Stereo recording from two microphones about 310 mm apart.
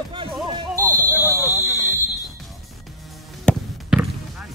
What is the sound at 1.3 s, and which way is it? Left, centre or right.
Buzzer, centre.